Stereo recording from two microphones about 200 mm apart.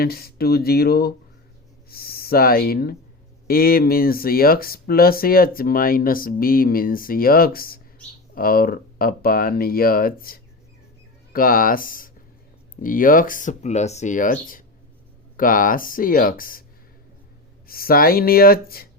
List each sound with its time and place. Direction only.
0.0 s speech: 50° left (ahead or behind)
17.7 s speech: 45° left (ahead or behind)